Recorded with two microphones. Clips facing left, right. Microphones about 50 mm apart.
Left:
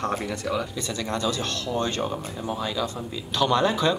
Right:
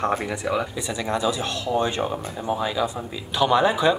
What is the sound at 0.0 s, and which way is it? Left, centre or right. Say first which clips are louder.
Speech: right 3 dB; centre.